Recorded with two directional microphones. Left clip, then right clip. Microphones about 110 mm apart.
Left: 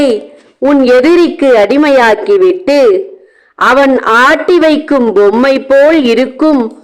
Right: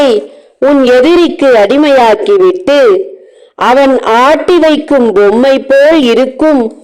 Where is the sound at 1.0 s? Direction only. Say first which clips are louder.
Right 1 dB; 65° right (ahead or behind).